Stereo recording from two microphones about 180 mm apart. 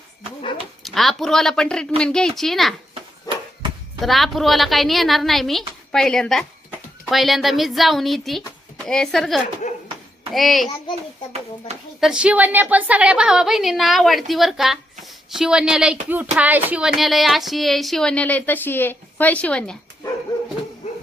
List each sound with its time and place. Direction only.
0.8 s a woman's voice: centre (ahead or behind)
2.9 s a sound: 30° right (ahead or behind)
4.0 s a woman's voice: centre (ahead or behind)
9.6 s a sound: 40° left (ahead or behind)
10.3 s a woman's voice: centre (ahead or behind)
11.9 s a woman's voice: 5° right (ahead or behind)